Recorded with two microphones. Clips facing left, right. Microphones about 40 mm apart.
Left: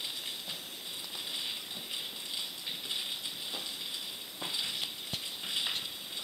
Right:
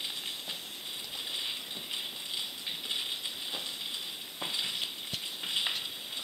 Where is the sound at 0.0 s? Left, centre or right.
Centre.